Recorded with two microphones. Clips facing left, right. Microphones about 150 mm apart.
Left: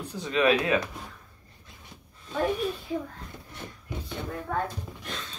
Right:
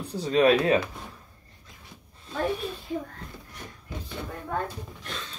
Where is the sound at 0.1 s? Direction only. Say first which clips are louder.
Right 3 dB; 35° right (ahead or behind).